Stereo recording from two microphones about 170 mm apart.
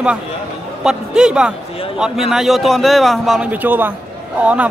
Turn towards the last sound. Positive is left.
turn(degrees=-10)  # may be behind; listen again after turning